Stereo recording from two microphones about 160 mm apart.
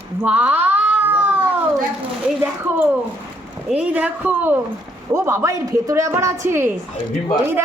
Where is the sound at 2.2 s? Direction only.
10° right (ahead or behind).